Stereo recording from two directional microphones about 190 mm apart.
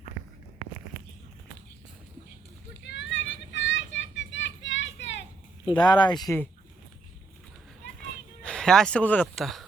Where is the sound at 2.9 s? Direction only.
70° left (ahead or behind).